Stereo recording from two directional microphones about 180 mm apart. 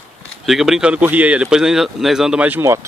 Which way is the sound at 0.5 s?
Centre (ahead or behind).